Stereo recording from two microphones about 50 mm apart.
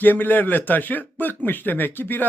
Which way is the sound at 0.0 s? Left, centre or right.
Left.